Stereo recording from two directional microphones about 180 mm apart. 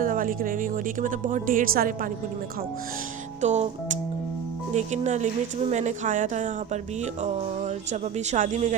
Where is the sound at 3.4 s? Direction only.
40° right (ahead or behind).